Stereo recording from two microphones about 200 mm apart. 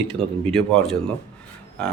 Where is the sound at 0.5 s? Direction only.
Centre (ahead or behind).